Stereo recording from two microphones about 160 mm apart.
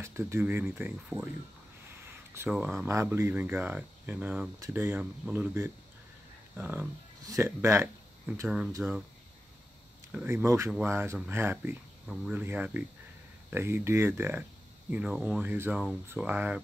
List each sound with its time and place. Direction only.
0.0 s speech: 15° right (ahead or behind)
2.3 s speech: 10° right (ahead or behind)
10.1 s speech: 15° right (ahead or behind)